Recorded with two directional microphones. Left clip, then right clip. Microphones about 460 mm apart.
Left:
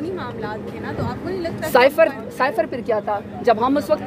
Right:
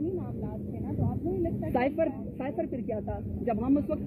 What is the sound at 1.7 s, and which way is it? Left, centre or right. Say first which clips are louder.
A woman's voice: left 15 dB; left.